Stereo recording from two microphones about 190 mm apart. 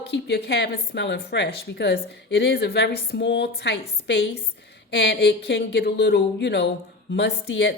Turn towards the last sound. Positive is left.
turn(degrees=70)  # may be behind; listen again after turning